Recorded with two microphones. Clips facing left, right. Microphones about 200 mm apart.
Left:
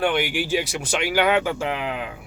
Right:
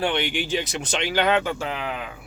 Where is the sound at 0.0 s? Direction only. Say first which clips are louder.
Left 2 dB; 5° left (ahead or behind).